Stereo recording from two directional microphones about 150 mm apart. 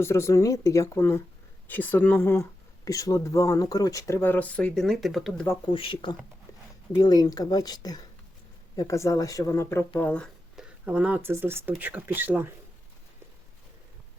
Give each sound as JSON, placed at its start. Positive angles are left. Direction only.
{"t": 0.0, "sound": "speech", "side_deg": 20}
{"t": 5.7, "sound": "speech", "side_deg": 35}
{"t": 10.5, "sound": "speech", "side_deg": -5}